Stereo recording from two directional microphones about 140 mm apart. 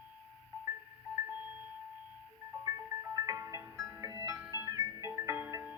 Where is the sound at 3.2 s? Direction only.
25° right (ahead or behind).